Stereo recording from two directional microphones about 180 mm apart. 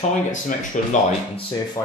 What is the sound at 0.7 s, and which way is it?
Speech, 45° left (ahead or behind).